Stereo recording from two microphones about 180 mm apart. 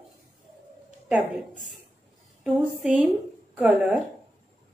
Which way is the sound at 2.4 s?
5° right (ahead or behind).